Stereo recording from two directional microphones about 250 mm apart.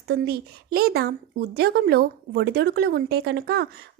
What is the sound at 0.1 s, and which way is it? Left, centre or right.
Speech, right.